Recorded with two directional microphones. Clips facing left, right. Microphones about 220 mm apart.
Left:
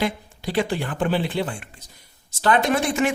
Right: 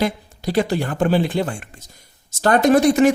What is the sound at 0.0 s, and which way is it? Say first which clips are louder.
A man's voice: right 4 dB; 40° right (ahead or behind).